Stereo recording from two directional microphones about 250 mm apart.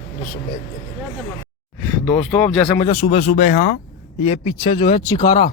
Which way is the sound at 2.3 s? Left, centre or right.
Centre.